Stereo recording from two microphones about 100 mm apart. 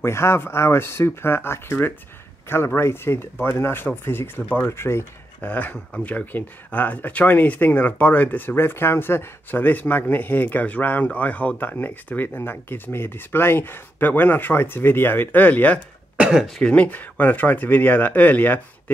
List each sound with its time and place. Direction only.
0.0 s speech: 25° left (ahead or behind)
16.2 s speech: 5° right (ahead or behind)
16.5 s speech: 10° left (ahead or behind)